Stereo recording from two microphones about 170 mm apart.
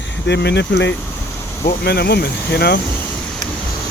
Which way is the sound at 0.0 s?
85° left.